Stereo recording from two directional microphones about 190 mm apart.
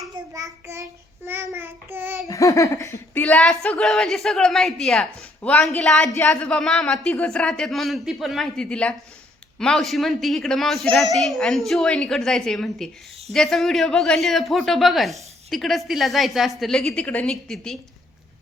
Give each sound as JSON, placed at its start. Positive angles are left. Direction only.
{"t": 0.3, "sound": "child singing", "side_deg": -15}
{"t": 2.2, "sound": "a woman's voice", "side_deg": 15}
{"t": 3.2, "sound": "speech", "side_deg": 5}